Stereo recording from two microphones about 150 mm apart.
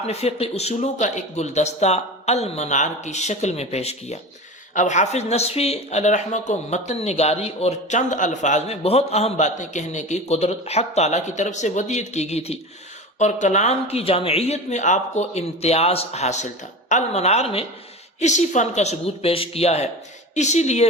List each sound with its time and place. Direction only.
0.1 s speech: 45° left (ahead or behind)
18.2 s speech: 50° left (ahead or behind)